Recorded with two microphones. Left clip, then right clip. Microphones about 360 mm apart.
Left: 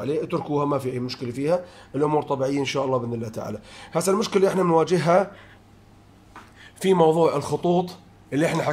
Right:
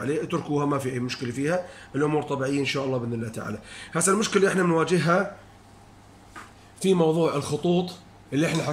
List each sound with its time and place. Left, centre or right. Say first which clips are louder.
0.0 s speech: left 2 dB; centre
6.8 s speech: left 4 dB; left